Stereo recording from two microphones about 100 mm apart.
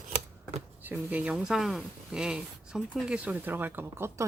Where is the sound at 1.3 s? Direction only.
5° right (ahead or behind).